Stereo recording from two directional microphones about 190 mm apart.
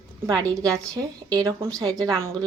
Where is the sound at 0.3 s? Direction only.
20° right (ahead or behind).